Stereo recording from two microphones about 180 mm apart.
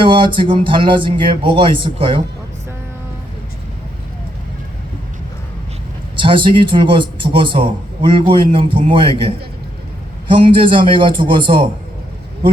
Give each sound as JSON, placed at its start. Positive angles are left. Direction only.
{"t": 0.0, "sound": "speech", "side_deg": -25}
{"t": 6.1, "sound": "speech", "side_deg": -30}
{"t": 10.3, "sound": "speech", "side_deg": -30}